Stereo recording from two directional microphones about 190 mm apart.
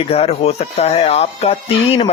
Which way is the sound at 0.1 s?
30° left (ahead or behind).